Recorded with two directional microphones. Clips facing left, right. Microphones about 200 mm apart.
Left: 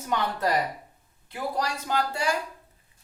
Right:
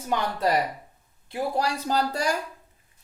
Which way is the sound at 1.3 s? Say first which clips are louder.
Right 3 dB; 35° right (ahead or behind).